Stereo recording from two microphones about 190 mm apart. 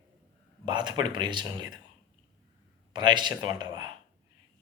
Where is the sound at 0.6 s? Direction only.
25° right (ahead or behind).